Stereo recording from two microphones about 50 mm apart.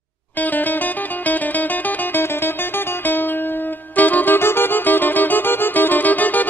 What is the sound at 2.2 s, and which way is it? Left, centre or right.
Music, left.